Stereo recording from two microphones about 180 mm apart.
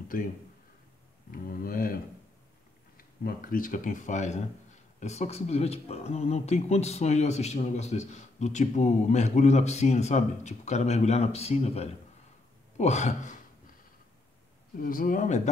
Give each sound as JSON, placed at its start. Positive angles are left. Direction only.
{"t": 1.3, "sound": "speech", "side_deg": 50}
{"t": 3.0, "sound": "speech", "side_deg": 50}
{"t": 14.8, "sound": "speech", "side_deg": 50}